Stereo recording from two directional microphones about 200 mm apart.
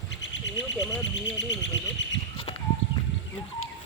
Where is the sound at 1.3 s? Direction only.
65° left (ahead or behind).